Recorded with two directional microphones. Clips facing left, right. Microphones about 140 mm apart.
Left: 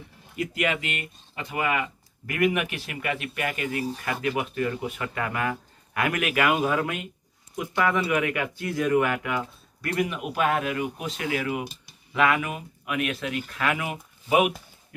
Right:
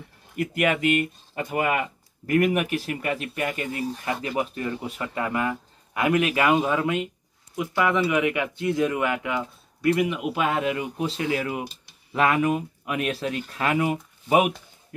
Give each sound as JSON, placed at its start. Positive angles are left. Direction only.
{"t": 0.4, "sound": "speech", "side_deg": -50}